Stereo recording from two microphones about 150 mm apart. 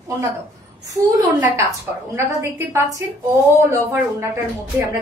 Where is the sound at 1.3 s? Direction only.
20° right (ahead or behind).